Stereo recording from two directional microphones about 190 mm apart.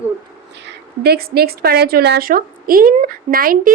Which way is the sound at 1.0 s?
55° right (ahead or behind).